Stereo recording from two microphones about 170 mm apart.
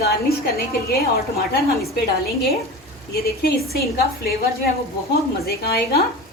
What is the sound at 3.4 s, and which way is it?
Speech, 65° left (ahead or behind).